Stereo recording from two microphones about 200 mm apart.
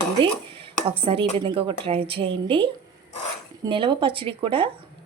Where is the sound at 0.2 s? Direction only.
25° right (ahead or behind).